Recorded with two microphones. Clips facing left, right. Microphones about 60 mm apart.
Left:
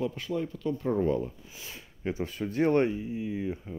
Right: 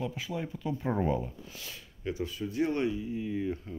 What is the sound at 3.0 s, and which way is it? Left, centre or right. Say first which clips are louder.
Speech: even; centre.